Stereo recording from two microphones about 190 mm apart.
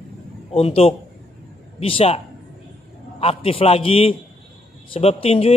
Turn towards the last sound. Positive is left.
turn(degrees=30)  # may be behind; listen again after turning